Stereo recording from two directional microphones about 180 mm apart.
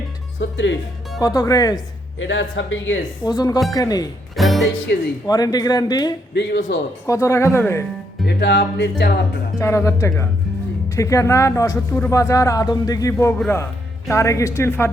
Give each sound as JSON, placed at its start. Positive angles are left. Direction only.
{"t": 0.3, "sound": "speech", "side_deg": 85}
{"t": 1.2, "sound": "speech", "side_deg": 20}
{"t": 2.1, "sound": "speech", "side_deg": 90}
{"t": 3.2, "sound": "speech", "side_deg": 20}
{"t": 4.4, "sound": "speech", "side_deg": 0}
{"t": 4.9, "sound": "speech", "side_deg": 65}
{"t": 5.2, "sound": "speech", "side_deg": 20}
{"t": 6.7, "sound": "speech", "side_deg": 75}
{"t": 7.1, "sound": "speech", "side_deg": 15}
{"t": 8.3, "sound": "speech", "side_deg": 70}
{"t": 9.6, "sound": "speech", "side_deg": 15}